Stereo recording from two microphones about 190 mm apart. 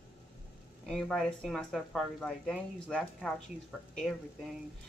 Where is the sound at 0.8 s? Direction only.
Centre (ahead or behind).